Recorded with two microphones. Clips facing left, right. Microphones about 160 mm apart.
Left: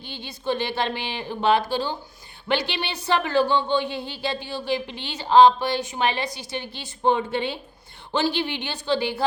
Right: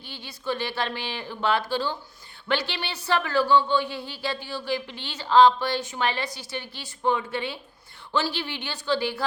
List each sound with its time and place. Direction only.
0.0 s speech: 20° left (ahead or behind)